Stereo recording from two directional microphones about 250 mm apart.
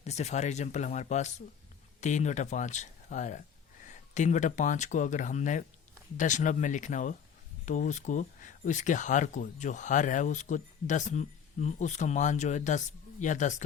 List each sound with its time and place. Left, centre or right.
0.0 s speech: left